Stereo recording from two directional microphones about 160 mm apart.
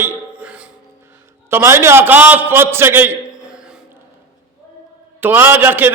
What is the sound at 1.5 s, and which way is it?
A man's voice, 15° right (ahead or behind).